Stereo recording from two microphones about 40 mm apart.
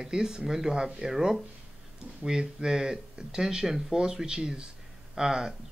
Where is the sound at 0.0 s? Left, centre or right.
Centre.